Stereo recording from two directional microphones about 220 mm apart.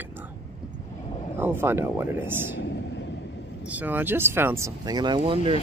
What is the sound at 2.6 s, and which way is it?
Vehicle, 55° left (ahead or behind).